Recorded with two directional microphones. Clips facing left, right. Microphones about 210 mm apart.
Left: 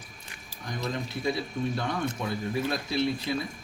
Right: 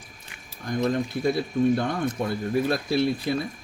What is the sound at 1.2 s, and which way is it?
Speech, 50° right (ahead or behind).